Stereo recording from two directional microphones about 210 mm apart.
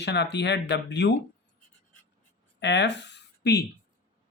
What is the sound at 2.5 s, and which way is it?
Speech, 55° left (ahead or behind).